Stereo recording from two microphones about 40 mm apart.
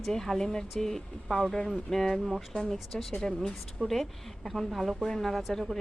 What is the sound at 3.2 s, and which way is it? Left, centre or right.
Speech, centre.